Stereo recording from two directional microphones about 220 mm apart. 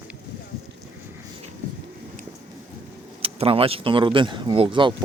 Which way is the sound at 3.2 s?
25° right (ahead or behind).